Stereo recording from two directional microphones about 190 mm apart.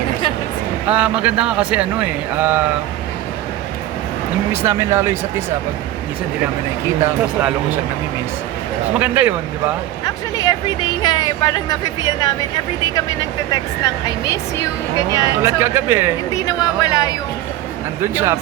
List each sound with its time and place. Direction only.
0.9 s speech: 5° right (ahead or behind)
4.5 s speech: 15° right (ahead or behind)
9.0 s speech: 10° right (ahead or behind)
10.3 s speech: 20° left (ahead or behind)
13.5 s speech: 20° left (ahead or behind)
15.4 s speech: 15° right (ahead or behind)
16.3 s speech: 20° left (ahead or behind)
18.0 s speech: 15° right (ahead or behind)